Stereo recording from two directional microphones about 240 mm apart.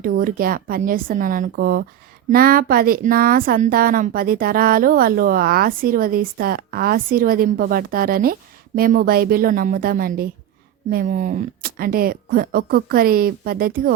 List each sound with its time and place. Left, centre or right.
0.0 s speech: right